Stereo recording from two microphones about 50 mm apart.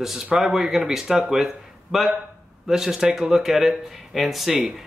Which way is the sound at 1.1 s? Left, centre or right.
Centre.